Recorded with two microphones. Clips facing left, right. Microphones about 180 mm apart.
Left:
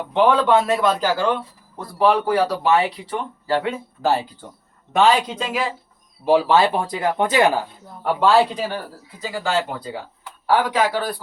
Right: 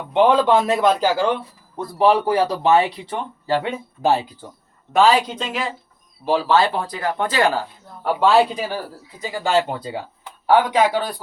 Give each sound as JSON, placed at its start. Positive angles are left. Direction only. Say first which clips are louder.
{"t": 0.1, "sound": "a man's voice", "louder": "right 1 dB", "side_deg": -20}
{"t": 5.3, "sound": "speech", "louder": "left 2 dB", "side_deg": 5}
{"t": 8.0, "sound": "speech", "louder": "right 1 dB", "side_deg": 0}
{"t": 9.3, "sound": "a man's voice", "louder": "right 3 dB", "side_deg": -20}